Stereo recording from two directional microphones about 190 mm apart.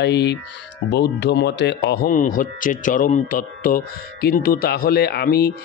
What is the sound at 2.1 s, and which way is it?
Speech, 45° left (ahead or behind).